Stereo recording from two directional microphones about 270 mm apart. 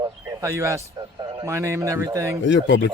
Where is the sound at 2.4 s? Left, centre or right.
Left.